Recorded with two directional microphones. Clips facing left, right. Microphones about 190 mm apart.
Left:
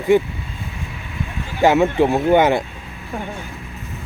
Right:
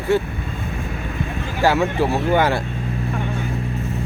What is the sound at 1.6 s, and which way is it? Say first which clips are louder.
Speech: left 4 dB; 20° left (ahead or behind).